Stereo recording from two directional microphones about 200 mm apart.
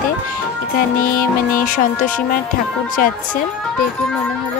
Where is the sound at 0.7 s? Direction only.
45° left (ahead or behind).